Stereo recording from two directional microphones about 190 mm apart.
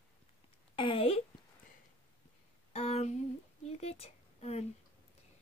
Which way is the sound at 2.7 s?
35° left (ahead or behind).